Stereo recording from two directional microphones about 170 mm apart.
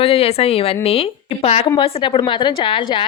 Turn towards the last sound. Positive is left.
turn(degrees=30)  # may be behind; listen again after turning